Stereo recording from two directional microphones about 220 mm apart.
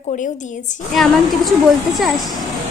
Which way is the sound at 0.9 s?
Centre (ahead or behind).